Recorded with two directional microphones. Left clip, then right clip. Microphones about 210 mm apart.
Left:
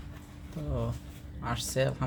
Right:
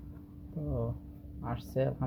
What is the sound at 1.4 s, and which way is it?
Speech, 5° right (ahead or behind).